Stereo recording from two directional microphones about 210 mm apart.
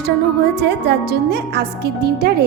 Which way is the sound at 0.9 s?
50° right (ahead or behind).